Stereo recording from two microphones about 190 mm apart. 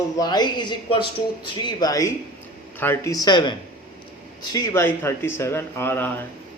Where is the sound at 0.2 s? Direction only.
20° left (ahead or behind).